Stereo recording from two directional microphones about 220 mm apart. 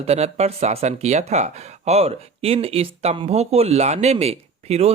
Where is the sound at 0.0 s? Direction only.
30° right (ahead or behind).